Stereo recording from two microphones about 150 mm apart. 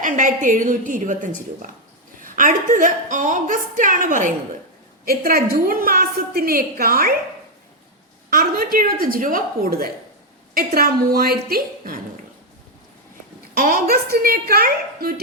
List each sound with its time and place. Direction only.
0.0 s a woman's voice: 60° right (ahead or behind)
5.0 s a woman's voice: 85° right
8.3 s a woman's voice: 70° right (ahead or behind)
13.5 s a woman's voice: 80° right